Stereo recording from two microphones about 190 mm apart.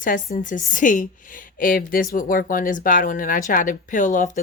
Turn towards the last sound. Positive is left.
turn(degrees=40)  # may be behind; listen again after turning